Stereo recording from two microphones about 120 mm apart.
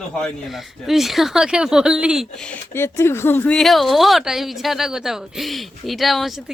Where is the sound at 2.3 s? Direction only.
10° left (ahead or behind).